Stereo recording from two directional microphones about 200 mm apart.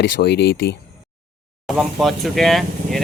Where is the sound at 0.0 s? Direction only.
55° left (ahead or behind).